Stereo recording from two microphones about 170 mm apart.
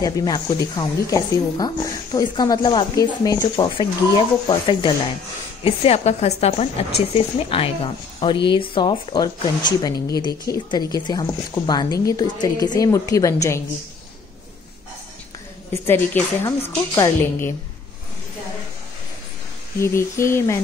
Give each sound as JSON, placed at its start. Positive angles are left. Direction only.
{"t": 0.0, "sound": "speech", "side_deg": 25}
{"t": 15.7, "sound": "a woman's voice", "side_deg": 15}
{"t": 19.8, "sound": "a woman's voice", "side_deg": 15}